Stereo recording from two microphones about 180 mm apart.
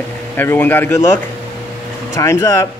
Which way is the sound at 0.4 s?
10° left (ahead or behind).